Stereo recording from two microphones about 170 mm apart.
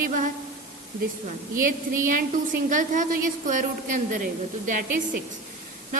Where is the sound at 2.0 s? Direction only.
50° right (ahead or behind).